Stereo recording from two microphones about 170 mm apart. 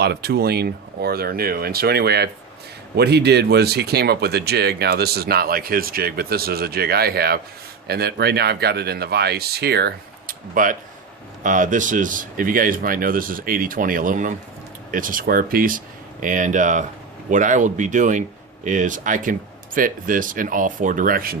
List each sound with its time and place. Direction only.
0.0 s speech: 70° right (ahead or behind)